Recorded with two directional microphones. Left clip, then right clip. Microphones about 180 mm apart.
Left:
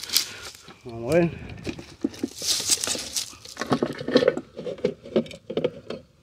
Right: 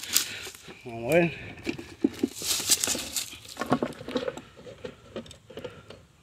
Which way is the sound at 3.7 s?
30° left (ahead or behind).